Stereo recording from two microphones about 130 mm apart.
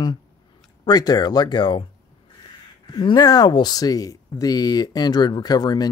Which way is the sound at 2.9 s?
35° left (ahead or behind).